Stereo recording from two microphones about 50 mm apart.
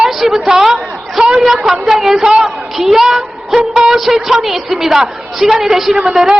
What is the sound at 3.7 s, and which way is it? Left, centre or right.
Music, centre.